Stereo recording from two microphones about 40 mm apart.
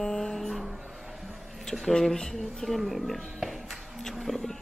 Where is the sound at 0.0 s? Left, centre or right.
Centre.